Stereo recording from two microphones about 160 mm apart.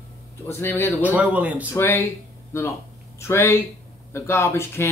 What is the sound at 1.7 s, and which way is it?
Speech, 15° left (ahead or behind).